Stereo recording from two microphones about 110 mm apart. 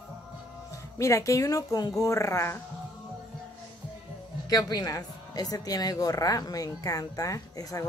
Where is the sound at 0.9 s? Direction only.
30° left (ahead or behind).